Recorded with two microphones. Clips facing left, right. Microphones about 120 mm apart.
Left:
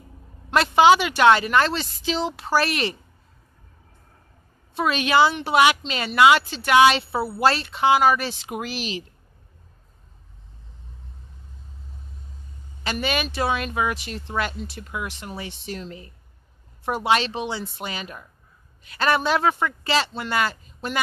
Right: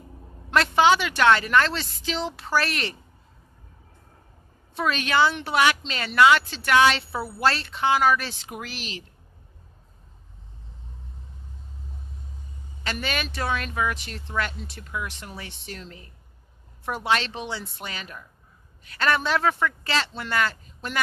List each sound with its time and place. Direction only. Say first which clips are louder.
0.5 s speech: left 3 dB; 15° left (ahead or behind)
4.7 s speech: left 3 dB; 15° left (ahead or behind)
12.8 s speech: left 4 dB; 15° left (ahead or behind)